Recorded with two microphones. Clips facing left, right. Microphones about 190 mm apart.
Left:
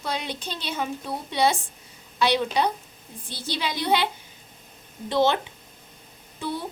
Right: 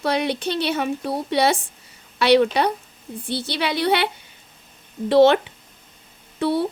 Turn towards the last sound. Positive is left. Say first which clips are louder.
# right 9 dB
turn(degrees=-70)  # may be behind; listen again after turning